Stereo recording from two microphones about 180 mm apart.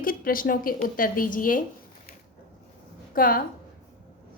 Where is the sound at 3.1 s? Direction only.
50° left (ahead or behind).